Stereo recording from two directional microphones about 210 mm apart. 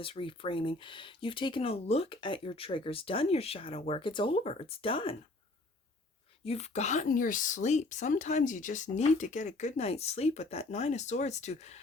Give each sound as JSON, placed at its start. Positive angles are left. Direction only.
{"t": 0.0, "sound": "speech", "side_deg": 25}
{"t": 6.4, "sound": "speech", "side_deg": 30}